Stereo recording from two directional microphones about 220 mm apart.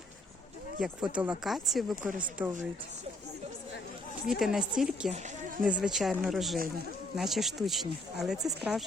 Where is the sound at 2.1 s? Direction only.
40° right (ahead or behind).